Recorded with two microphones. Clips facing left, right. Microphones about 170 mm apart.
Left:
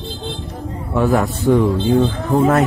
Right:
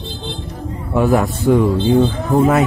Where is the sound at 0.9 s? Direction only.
15° right (ahead or behind).